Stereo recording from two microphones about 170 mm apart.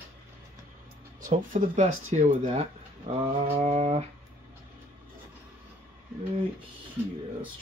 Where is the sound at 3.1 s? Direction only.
35° right (ahead or behind).